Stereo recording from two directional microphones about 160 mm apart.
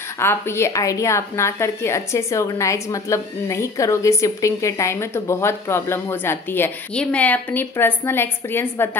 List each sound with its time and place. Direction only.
0.2 s a woman's voice: 15° left (ahead or behind)